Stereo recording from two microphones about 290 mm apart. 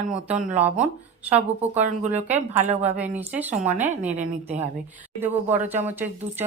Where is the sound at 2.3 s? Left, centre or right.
Right.